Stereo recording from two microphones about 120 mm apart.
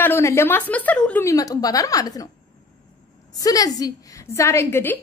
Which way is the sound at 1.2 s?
30° left (ahead or behind).